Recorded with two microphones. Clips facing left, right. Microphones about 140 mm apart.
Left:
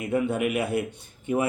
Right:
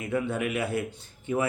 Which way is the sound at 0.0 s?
15° left (ahead or behind).